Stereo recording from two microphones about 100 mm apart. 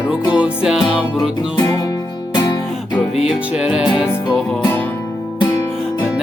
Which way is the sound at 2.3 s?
45° left (ahead or behind).